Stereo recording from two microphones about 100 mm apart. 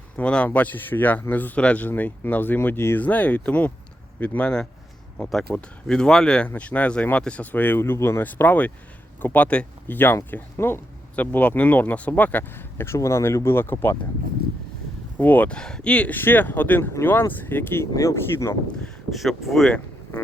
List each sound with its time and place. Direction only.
0.2 s speech: 15° left (ahead or behind)
15.2 s speech: 15° left (ahead or behind)
17.9 s speech: 30° left (ahead or behind)
19.1 s speech: centre (ahead or behind)